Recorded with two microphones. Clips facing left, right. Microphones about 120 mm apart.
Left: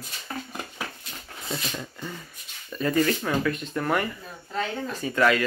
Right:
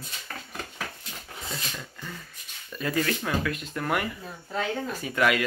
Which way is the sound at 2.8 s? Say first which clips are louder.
Left 4 dB; centre (ahead or behind).